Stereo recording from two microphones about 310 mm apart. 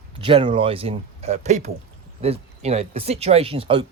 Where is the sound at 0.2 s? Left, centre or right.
Centre.